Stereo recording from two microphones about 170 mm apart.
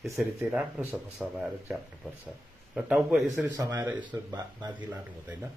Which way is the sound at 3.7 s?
15° right (ahead or behind).